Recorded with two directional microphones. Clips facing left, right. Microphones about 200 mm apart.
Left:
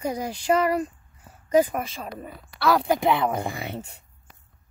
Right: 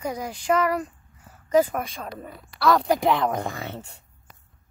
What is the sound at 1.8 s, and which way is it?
A woman's voice, 5° left (ahead or behind).